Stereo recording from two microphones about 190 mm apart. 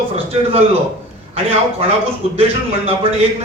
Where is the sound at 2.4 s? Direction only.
30° right (ahead or behind).